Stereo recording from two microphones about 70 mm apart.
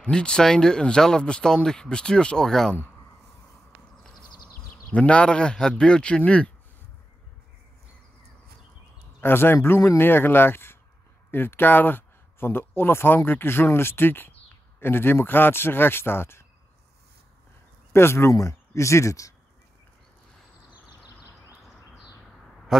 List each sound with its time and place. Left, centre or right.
0.0 s speech: centre
3.9 s a sound: centre
4.9 s speech: centre
9.2 s speech: left
17.9 s speech: left
22.7 s a man's voice: centre